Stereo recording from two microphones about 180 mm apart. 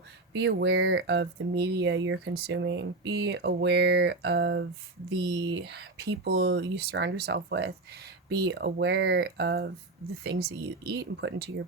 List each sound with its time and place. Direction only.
0.3 s speech: 70° right (ahead or behind)
10.8 s speech: 65° right (ahead or behind)